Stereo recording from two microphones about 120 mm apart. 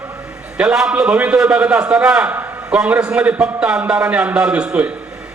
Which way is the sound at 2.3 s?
10° right (ahead or behind).